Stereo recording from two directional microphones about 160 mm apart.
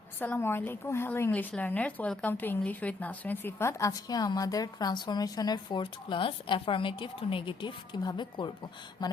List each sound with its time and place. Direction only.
0.2 s speech: 15° left (ahead or behind); by 9.0 s 30° left (ahead or behind)